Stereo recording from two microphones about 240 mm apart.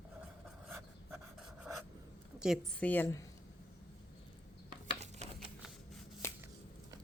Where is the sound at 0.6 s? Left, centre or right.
Centre.